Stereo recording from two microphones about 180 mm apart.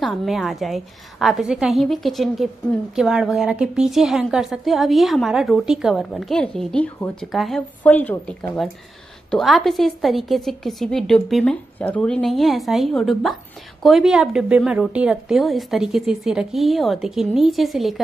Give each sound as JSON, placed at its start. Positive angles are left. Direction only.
{"t": 0.0, "sound": "a woman's voice", "side_deg": 0}